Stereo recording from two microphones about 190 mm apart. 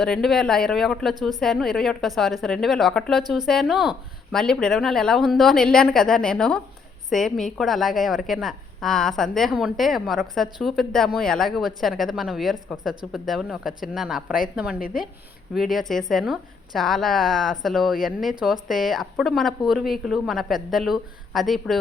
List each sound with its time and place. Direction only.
0.0 s a woman's voice: centre (ahead or behind)